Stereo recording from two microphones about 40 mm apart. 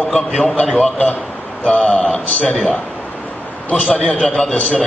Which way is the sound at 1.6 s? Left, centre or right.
Left.